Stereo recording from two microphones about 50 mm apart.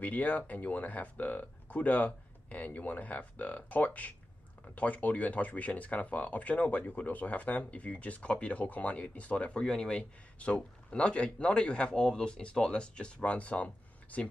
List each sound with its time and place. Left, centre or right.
0.0 s speech: left